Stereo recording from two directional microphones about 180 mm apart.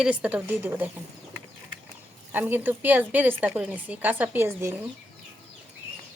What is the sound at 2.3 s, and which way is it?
A woman's voice, 10° right (ahead or behind).